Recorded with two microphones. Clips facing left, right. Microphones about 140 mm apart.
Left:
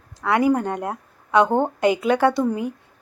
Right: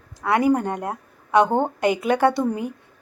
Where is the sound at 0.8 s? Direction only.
25° right (ahead or behind).